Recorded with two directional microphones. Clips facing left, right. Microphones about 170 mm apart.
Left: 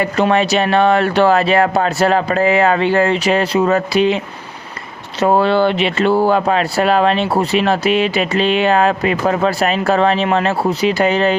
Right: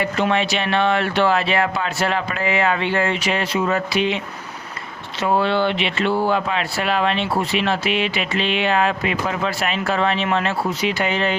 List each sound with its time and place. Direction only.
0.0 s speech: 40° left (ahead or behind)
5.2 s speech: 40° left (ahead or behind)